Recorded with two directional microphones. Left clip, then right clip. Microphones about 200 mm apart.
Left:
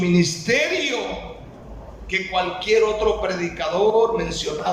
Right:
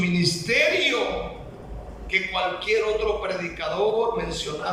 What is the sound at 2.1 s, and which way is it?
A man's voice, 35° left (ahead or behind).